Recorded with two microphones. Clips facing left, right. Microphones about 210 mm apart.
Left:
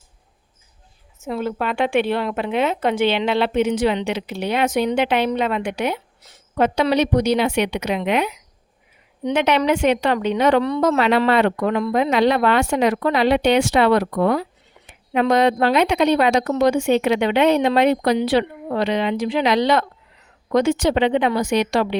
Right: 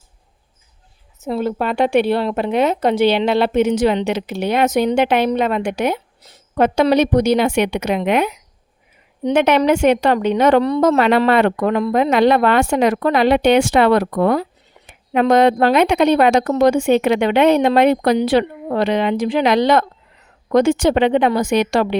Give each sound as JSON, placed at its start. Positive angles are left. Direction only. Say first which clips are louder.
{"t": 1.2, "sound": "a woman's voice", "louder": "right 4 dB", "side_deg": -35}